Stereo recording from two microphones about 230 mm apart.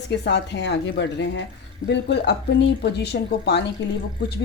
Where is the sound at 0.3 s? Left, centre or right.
Left.